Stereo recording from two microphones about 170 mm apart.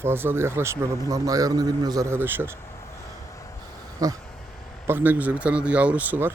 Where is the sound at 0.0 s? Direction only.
15° right (ahead or behind).